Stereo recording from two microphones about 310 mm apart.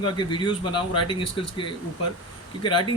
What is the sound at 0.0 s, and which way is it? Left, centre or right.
Speech, centre.